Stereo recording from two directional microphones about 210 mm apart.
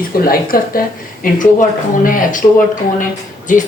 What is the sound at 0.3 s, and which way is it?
Speech, 45° left (ahead or behind).